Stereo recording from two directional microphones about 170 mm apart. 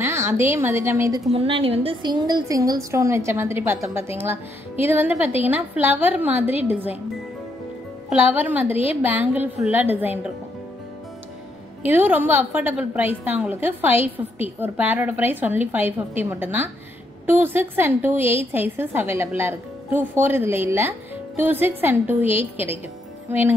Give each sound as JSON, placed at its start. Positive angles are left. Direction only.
{"t": 0.0, "sound": "a woman's voice", "side_deg": -15}
{"t": 1.3, "sound": "a woman's voice", "side_deg": -35}
{"t": 8.1, "sound": "a woman's voice", "side_deg": -10}
{"t": 11.8, "sound": "a woman's voice", "side_deg": -10}